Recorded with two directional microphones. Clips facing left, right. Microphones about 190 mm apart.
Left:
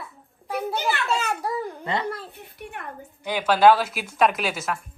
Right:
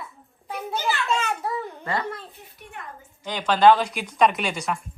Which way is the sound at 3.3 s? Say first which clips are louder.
Even; 10° left (ahead or behind).